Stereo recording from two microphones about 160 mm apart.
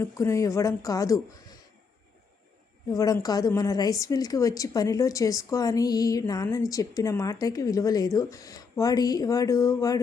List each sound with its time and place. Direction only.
0.0 s a woman's voice: 20° left (ahead or behind)
2.9 s a woman's voice: 20° left (ahead or behind)